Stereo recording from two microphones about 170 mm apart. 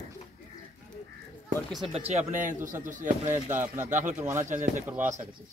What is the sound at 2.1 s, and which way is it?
Speech, 45° right (ahead or behind).